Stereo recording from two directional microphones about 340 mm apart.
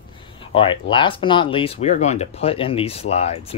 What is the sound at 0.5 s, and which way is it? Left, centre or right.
Speech, centre.